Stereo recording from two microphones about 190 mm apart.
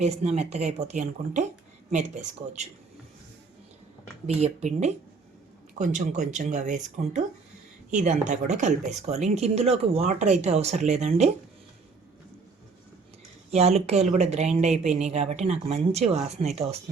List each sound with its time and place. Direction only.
0.0 s speech: 35° right (ahead or behind)
4.4 s speech: 35° right (ahead or behind)
13.5 s speech: 35° right (ahead or behind)